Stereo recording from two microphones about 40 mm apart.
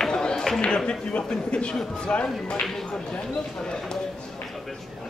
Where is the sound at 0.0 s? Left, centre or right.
Centre.